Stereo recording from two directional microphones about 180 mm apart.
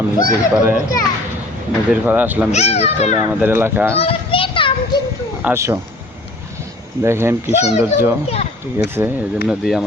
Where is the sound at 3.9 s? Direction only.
30° left (ahead or behind).